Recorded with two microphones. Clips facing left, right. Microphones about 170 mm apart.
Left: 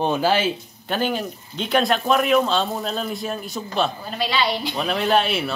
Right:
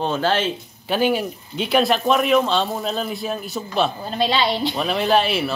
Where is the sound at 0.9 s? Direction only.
10° right (ahead or behind).